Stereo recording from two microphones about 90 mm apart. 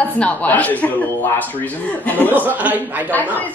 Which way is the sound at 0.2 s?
15° left (ahead or behind).